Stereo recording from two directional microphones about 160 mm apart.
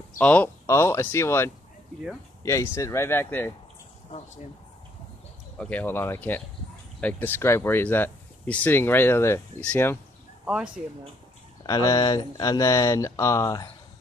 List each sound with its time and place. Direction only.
0.2 s speech: 10° left (ahead or behind)
5.6 s speech: 10° left (ahead or behind)
10.4 s speech: 5° right (ahead or behind)
11.6 s speech: 20° left (ahead or behind)